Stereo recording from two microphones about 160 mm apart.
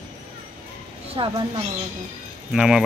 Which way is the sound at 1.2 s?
30° right (ahead or behind).